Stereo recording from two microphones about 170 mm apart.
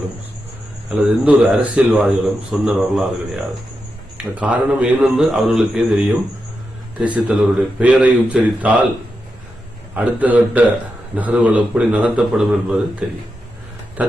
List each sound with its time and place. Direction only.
0.9 s a man's voice: 5° right (ahead or behind)
9.9 s speech: 10° right (ahead or behind)